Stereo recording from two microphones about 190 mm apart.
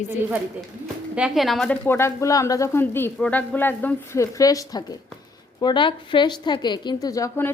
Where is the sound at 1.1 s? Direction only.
5° right (ahead or behind).